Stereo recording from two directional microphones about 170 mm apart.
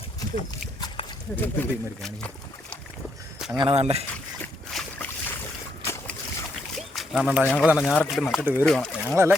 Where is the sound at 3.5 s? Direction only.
35° right (ahead or behind).